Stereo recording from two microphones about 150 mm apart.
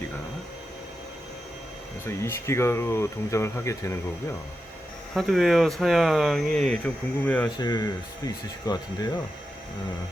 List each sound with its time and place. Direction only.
2.0 s speech: 15° left (ahead or behind)
5.1 s speech: centre (ahead or behind)
7.6 s speech: 25° left (ahead or behind)